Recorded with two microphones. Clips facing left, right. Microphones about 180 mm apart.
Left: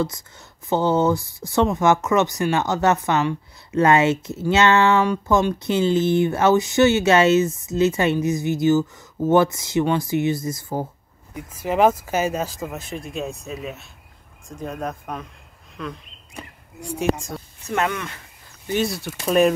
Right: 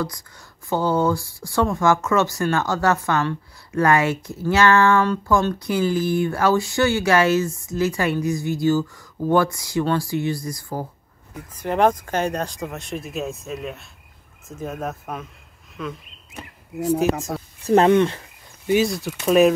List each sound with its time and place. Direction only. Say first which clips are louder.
0.0 s speech: left 3 dB; 25° left (ahead or behind)
11.3 s speech: left 1 dB; 5° left (ahead or behind)
15.8 s a sound: right 1 dB; 5° right (ahead or behind)
17.6 s speech: right 10 dB; 30° right (ahead or behind)
18.8 s speech: right 3 dB; centre (ahead or behind)